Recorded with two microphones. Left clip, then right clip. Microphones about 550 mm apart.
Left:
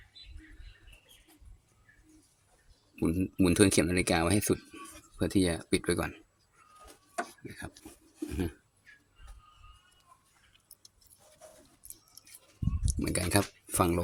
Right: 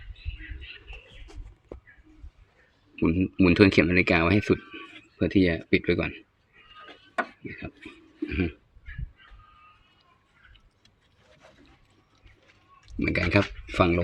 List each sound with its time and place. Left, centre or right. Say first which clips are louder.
2.9 s speech: right 6 dB; left
7.2 s chopping: right 7 dB; left
12.9 s speech: right 7 dB; left